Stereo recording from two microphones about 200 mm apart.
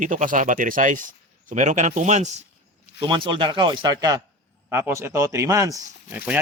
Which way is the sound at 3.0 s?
25° right (ahead or behind).